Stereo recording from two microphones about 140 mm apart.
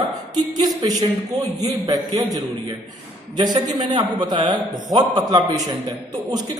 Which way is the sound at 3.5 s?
30° right (ahead or behind).